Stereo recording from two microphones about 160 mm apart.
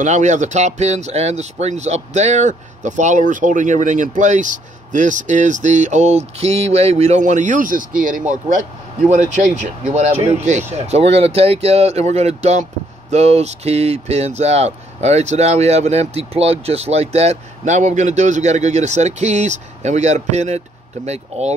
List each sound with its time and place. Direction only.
0.0 s speech: 50° right (ahead or behind)